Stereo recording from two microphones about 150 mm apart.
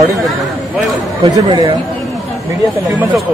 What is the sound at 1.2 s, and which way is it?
Speech, 30° right (ahead or behind).